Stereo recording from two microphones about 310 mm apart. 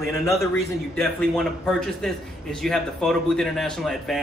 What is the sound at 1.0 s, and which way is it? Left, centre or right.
A man's voice, centre.